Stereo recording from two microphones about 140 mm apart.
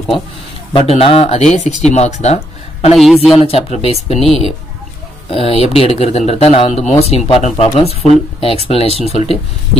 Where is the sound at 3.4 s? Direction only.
45° left (ahead or behind).